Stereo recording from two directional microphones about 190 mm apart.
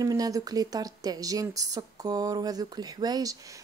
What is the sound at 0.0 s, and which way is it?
A woman's voice, 20° right (ahead or behind).